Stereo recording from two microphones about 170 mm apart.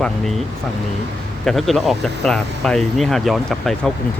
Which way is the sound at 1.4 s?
Centre (ahead or behind).